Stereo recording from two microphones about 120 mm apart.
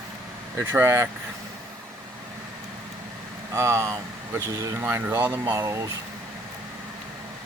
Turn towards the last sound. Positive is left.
turn(degrees=-25)  # may be behind; listen again after turning